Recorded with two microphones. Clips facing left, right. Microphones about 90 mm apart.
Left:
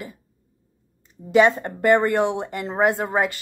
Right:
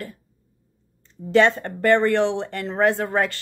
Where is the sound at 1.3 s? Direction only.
15° left (ahead or behind).